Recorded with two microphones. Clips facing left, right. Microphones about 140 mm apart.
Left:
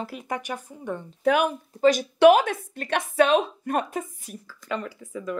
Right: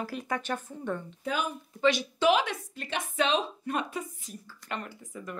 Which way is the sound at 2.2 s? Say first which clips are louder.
Left 10 dB; 50° left (ahead or behind).